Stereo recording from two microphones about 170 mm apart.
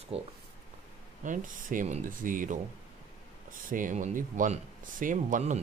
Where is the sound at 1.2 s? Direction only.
50° right (ahead or behind).